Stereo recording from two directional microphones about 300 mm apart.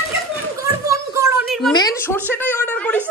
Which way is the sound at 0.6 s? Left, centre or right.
Centre.